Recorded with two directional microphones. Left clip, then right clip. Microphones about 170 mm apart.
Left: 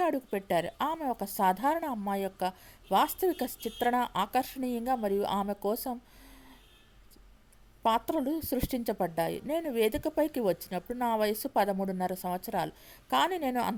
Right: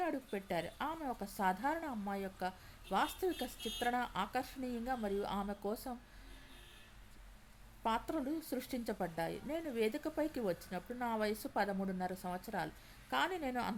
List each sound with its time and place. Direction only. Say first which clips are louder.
0.0 s a woman's voice: left 9 dB; 45° left (ahead or behind)
7.8 s a woman's voice: left 9 dB; 40° left (ahead or behind)